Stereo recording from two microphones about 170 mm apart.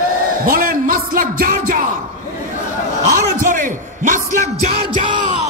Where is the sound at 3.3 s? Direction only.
50° right (ahead or behind).